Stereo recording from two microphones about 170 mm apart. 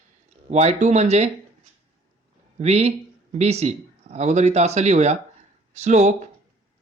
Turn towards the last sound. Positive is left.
turn(degrees=-40)  # may be behind; listen again after turning